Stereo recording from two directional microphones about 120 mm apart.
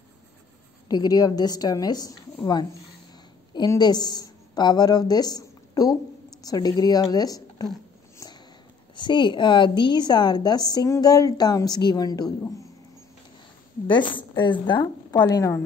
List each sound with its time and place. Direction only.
0.8 s a woman's voice: 35° left (ahead or behind)
3.5 s a woman's voice: 35° left (ahead or behind)
8.9 s a woman's voice: 40° left (ahead or behind)
13.8 s a woman's voice: 40° left (ahead or behind); by 15.6 s 25° left (ahead or behind)